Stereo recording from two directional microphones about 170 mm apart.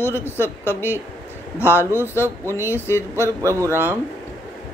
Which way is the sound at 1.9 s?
15° right (ahead or behind).